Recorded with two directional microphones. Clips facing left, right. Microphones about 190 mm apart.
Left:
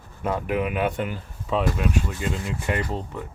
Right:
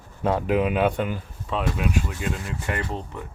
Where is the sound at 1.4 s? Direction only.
Centre (ahead or behind).